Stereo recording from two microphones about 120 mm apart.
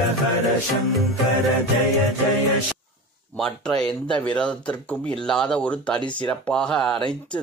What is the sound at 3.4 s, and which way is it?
A man's voice, 5° left (ahead or behind).